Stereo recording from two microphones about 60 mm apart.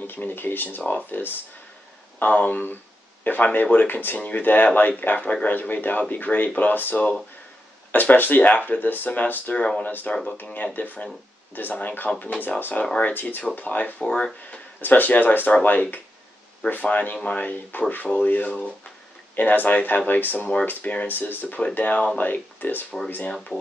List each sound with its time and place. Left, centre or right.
0.0 s a man's voice: left
14.1 s speech: centre
14.8 s a man's voice: left